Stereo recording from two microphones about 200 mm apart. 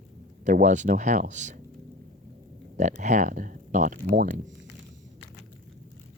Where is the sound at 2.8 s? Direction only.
35° right (ahead or behind).